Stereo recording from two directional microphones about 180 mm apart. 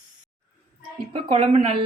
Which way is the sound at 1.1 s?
35° right (ahead or behind).